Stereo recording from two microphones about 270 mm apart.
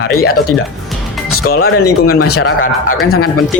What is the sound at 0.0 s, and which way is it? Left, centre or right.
Speech, left.